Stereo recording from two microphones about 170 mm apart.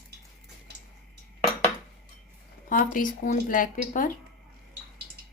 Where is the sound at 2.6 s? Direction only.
50° left (ahead or behind).